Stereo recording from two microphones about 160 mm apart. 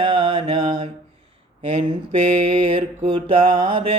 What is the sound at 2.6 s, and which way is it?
Mantra, 30° right (ahead or behind).